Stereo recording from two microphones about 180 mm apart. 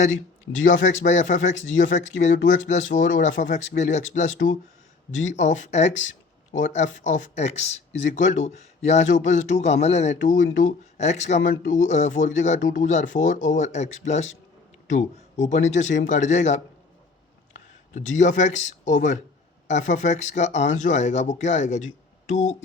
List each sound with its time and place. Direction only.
0.6 s speech: 45° left (ahead or behind)
17.9 s speech: 45° left (ahead or behind)